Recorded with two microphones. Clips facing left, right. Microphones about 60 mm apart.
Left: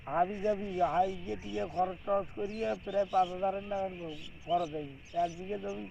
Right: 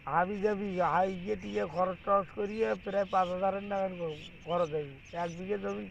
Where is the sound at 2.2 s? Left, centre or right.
Right.